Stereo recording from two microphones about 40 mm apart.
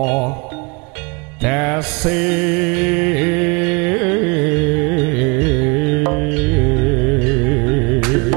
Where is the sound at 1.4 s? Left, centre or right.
Centre.